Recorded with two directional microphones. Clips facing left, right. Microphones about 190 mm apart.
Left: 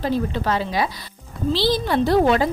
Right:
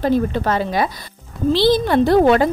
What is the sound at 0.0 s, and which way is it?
A woman's voice, 55° right (ahead or behind).